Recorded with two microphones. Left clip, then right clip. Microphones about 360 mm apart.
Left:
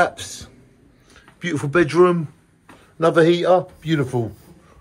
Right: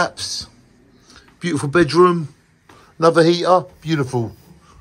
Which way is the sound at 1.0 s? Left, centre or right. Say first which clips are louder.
Right 2 dB; centre.